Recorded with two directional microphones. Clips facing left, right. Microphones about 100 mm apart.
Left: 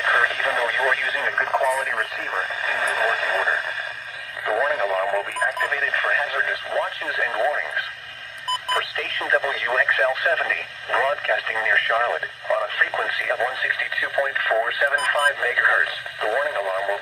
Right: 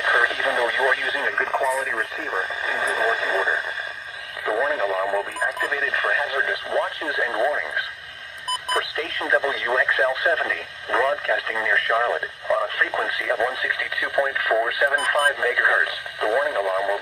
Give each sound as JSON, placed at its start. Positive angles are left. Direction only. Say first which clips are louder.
{"t": 0.0, "sound": "radio", "louder": "even", "side_deg": -15}
{"t": 1.4, "sound": "radio", "louder": "left 2 dB", "side_deg": 0}
{"t": 2.7, "sound": "radio", "louder": "even", "side_deg": -20}
{"t": 4.5, "sound": "radio", "louder": "left 1 dB", "side_deg": 0}
{"t": 4.9, "sound": "radio", "louder": "left 1 dB", "side_deg": -15}
{"t": 5.5, "sound": "speech", "louder": "left 1 dB", "side_deg": -15}
{"t": 8.7, "sound": "speech", "louder": "right 3 dB", "side_deg": -20}